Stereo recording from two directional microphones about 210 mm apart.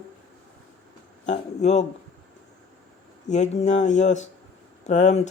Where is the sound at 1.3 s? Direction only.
35° left (ahead or behind).